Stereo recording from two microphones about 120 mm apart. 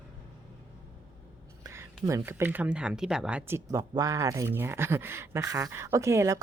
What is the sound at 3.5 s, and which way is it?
Speech, 30° right (ahead or behind).